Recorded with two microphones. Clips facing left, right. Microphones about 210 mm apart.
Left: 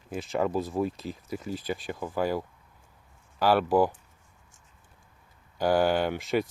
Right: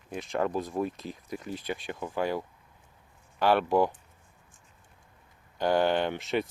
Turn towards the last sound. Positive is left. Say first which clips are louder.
# left 2 dB
turn(degrees=5)  # may be behind; listen again after turning